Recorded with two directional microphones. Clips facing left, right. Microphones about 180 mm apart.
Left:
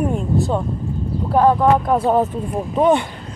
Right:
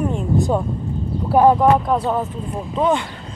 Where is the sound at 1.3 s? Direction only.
15° right (ahead or behind).